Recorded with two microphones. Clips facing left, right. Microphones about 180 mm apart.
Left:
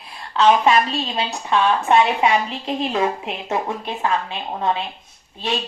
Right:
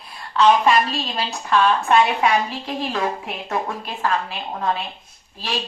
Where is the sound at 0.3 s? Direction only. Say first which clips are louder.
Even; 25° left (ahead or behind).